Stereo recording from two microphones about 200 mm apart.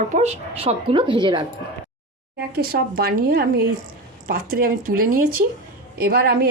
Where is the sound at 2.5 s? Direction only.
50° right (ahead or behind).